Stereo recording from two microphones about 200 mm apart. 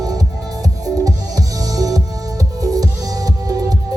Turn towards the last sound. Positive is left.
turn(degrees=-20)  # may be behind; listen again after turning